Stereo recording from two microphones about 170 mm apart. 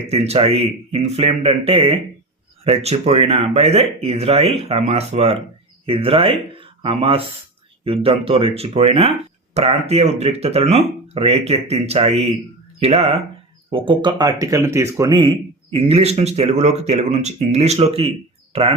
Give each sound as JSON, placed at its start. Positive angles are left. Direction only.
{"t": 0.1, "sound": "speech", "side_deg": -35}